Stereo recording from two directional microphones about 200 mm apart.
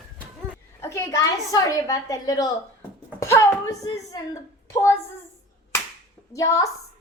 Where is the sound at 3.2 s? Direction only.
15° left (ahead or behind).